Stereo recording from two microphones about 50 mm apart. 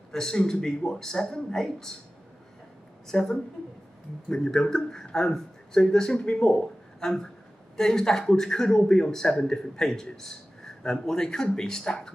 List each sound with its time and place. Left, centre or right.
0.1 s a man's voice: centre
3.1 s a man's voice: centre
6.1 s speech: left
6.5 s a man's voice: centre